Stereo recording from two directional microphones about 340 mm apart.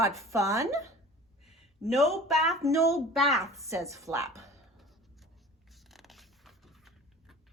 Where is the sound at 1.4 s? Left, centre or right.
Centre.